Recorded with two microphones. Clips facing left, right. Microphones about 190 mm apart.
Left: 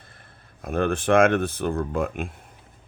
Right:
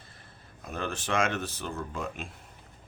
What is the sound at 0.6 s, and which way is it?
Speech, 55° left (ahead or behind).